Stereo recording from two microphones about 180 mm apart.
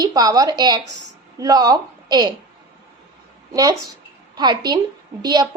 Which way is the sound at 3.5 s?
20° right (ahead or behind).